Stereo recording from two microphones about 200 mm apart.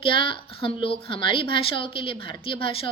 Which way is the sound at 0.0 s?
25° left (ahead or behind).